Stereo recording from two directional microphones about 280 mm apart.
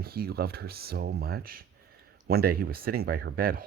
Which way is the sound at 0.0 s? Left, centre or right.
Right.